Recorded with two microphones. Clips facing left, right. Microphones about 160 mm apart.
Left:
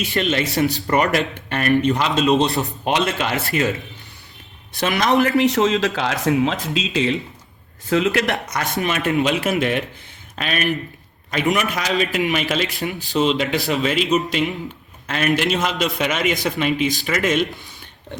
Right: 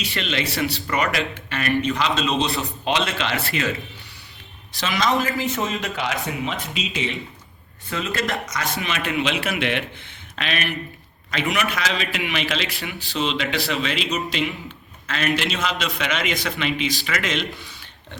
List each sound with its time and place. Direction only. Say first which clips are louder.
0.1 s speech: left 6 dB; 45° left (ahead or behind)
4.8 s speech: left 5 dB; 55° left (ahead or behind)
8.8 s a man's voice: left 6 dB; 45° left (ahead or behind)